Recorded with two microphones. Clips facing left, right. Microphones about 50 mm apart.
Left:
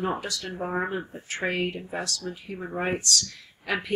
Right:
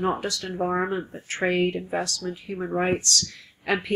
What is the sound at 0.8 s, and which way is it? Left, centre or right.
Speech, right.